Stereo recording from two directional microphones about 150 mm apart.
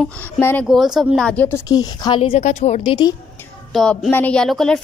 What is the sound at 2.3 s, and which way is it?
Speech, 50° left (ahead or behind).